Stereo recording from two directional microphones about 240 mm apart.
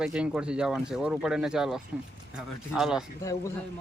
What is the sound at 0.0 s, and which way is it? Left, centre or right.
Speech, centre.